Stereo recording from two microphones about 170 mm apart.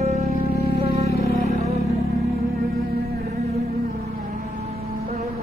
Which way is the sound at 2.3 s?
65° right (ahead or behind).